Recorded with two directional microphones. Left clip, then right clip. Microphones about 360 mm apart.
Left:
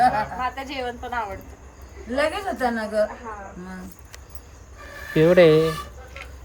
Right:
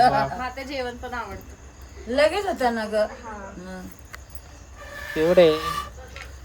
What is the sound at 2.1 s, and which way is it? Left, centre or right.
A woman's voice, right.